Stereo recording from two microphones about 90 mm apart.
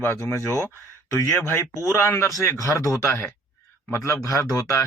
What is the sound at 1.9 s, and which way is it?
Speech, 30° left (ahead or behind).